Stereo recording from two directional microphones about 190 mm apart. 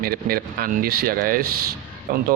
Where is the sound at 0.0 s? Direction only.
50° right (ahead or behind).